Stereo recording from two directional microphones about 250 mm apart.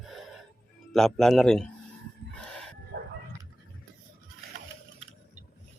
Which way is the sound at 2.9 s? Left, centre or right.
Right.